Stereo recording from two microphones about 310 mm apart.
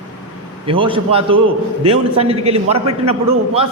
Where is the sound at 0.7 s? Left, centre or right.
Centre.